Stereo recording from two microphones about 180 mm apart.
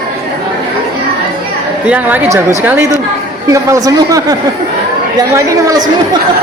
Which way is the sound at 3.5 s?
20° right (ahead or behind).